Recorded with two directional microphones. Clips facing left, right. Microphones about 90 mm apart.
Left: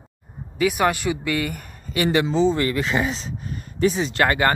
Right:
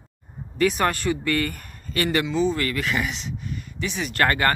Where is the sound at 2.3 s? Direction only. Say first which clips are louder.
Left 3 dB; 25° left (ahead or behind).